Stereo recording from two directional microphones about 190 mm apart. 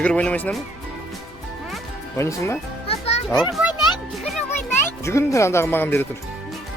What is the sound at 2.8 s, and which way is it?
Music, 30° left (ahead or behind).